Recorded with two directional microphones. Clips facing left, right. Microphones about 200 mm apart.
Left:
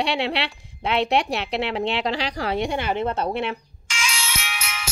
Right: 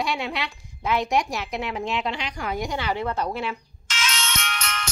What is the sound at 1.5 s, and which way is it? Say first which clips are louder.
Speech: left 5 dB; 75° left (ahead or behind).